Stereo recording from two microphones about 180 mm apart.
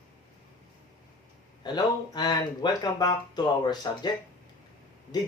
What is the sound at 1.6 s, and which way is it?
Speech, 25° left (ahead or behind).